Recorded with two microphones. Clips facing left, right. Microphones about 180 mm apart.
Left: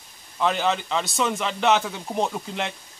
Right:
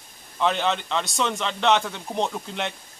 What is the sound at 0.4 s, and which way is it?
A man's voice, centre (ahead or behind).